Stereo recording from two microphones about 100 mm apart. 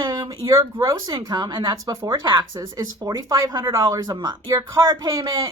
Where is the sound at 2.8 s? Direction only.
35° right (ahead or behind).